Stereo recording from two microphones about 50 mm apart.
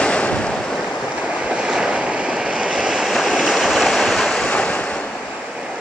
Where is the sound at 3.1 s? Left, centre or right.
Centre.